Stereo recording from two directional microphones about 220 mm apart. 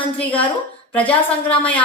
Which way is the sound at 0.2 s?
5° left (ahead or behind).